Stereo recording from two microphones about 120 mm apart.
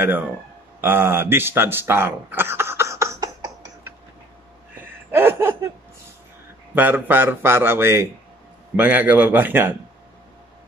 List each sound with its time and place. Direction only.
0.7 s speech: 15° right (ahead or behind)
5.1 s laughter: 20° right (ahead or behind)
6.7 s a man's voice: 15° right (ahead or behind)